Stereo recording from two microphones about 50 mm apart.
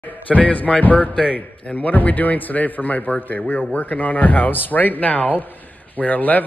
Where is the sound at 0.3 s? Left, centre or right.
Left.